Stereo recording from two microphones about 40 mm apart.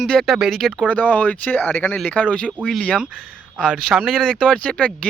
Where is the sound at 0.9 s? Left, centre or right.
Left.